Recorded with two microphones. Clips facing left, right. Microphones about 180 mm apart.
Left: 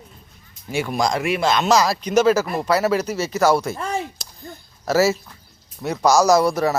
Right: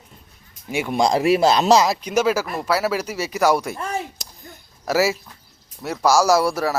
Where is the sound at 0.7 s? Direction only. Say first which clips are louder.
Even; 15° right (ahead or behind).